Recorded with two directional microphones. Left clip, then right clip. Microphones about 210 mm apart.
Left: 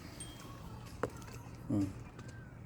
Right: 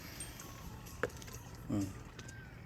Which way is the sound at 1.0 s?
30° left (ahead or behind).